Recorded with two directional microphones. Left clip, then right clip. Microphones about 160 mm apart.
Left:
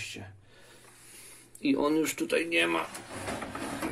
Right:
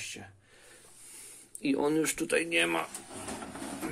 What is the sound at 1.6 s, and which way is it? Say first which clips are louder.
Speech: left 1 dB; 10° right (ahead or behind).